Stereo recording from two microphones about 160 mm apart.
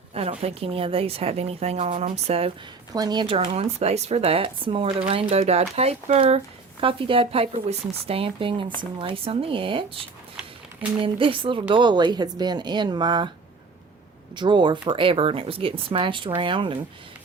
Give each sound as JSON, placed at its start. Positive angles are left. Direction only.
{"t": 0.1, "sound": "a woman's voice", "side_deg": -40}
{"t": 2.9, "sound": "a woman's voice", "side_deg": -25}
{"t": 11.0, "sound": "a woman's voice", "side_deg": -35}
{"t": 14.3, "sound": "a woman's voice", "side_deg": -30}